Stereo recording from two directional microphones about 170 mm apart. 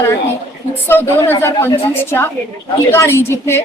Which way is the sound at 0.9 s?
10° left (ahead or behind).